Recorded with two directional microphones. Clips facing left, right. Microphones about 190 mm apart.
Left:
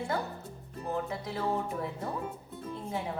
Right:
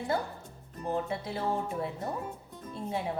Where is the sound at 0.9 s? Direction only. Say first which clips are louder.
Right 2 dB; 30° right (ahead or behind).